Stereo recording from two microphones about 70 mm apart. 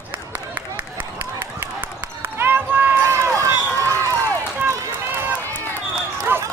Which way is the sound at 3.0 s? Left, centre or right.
Right.